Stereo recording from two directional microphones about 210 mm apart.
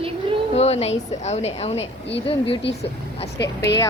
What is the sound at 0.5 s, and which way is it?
A woman's voice, 30° left (ahead or behind).